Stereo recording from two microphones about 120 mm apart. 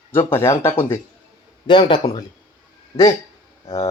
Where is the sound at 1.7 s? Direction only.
40° left (ahead or behind).